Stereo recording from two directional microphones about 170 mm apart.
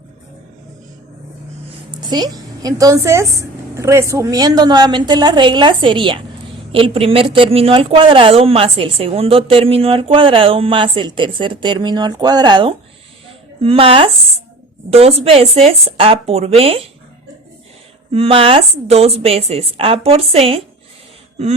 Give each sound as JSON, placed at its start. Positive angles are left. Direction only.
{"t": 2.0, "sound": "a woman's voice", "side_deg": -25}
{"t": 18.1, "sound": "a woman's voice", "side_deg": -35}